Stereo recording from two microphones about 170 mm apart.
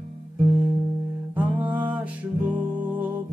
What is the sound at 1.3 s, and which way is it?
Music, 10° right (ahead or behind).